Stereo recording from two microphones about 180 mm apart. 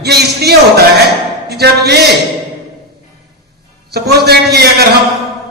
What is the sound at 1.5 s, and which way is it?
Speech, 65° right (ahead or behind).